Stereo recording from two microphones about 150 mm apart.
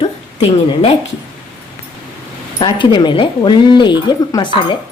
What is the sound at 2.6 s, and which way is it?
Speech, 30° left (ahead or behind).